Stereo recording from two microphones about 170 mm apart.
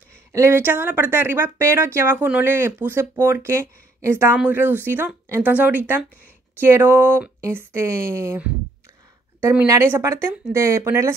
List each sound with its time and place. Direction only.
0.3 s speech: 15° right (ahead or behind)